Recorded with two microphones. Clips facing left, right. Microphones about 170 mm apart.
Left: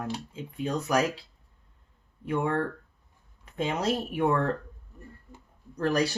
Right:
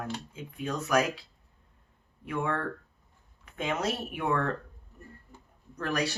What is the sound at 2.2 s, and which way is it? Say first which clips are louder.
Speech: left 4 dB; 35° left (ahead or behind).